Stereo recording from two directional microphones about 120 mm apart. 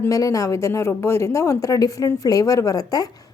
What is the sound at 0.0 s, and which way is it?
A woman's voice, 25° left (ahead or behind).